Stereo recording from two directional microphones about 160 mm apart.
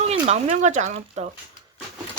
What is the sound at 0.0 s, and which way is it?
Speech, 40° right (ahead or behind).